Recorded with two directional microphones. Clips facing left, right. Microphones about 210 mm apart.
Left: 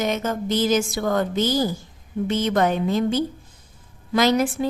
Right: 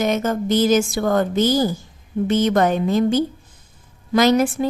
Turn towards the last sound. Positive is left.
turn(degrees=-45)  # may be behind; listen again after turning